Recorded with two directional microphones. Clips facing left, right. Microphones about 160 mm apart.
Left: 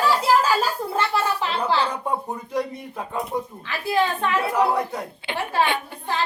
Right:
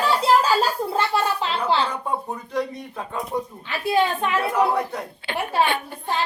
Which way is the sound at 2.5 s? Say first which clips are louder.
Even; 10° left (ahead or behind).